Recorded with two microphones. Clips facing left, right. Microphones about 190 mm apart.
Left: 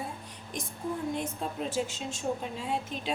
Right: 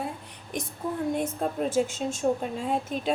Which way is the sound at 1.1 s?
50° right (ahead or behind).